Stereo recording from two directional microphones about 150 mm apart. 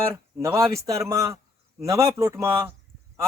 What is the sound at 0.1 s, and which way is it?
A man's voice, 20° right (ahead or behind).